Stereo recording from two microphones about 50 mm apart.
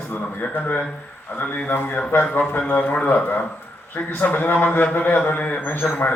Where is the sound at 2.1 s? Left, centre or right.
Left.